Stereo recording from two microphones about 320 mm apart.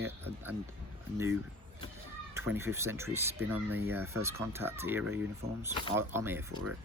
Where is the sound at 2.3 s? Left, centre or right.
Centre.